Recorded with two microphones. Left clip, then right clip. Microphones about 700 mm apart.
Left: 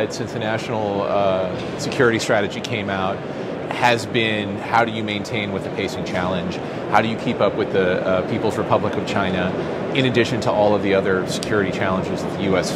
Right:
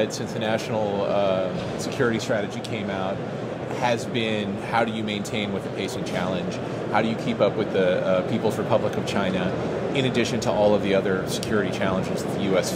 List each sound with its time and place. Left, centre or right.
1.1 s speech: centre
3.8 s speech: centre